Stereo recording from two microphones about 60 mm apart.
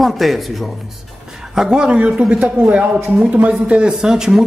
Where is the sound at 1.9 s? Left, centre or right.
Right.